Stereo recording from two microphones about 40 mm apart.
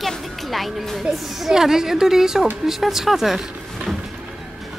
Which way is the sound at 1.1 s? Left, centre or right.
Centre.